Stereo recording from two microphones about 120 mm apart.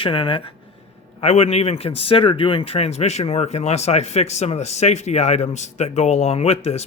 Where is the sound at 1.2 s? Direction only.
60° left (ahead or behind).